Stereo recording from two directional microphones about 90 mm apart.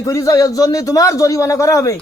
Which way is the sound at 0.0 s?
40° left (ahead or behind).